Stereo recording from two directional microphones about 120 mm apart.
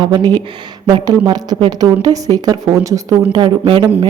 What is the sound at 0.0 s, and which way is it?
Speech, 35° right (ahead or behind).